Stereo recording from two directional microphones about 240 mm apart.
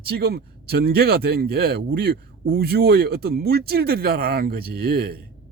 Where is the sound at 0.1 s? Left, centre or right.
Right.